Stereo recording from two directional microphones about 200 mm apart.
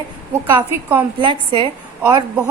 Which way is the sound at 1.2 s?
25° right (ahead or behind).